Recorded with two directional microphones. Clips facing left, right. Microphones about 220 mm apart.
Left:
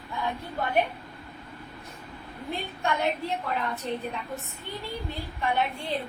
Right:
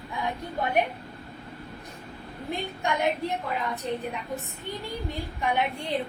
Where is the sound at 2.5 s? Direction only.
15° right (ahead or behind).